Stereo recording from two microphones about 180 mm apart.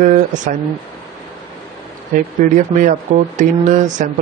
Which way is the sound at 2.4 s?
45° right (ahead or behind).